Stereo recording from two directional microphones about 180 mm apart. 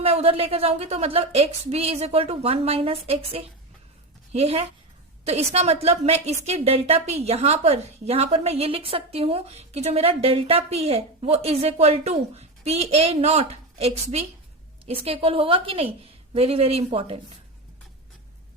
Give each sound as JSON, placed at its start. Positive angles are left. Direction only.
{"t": 0.0, "sound": "a woman's voice", "side_deg": -35}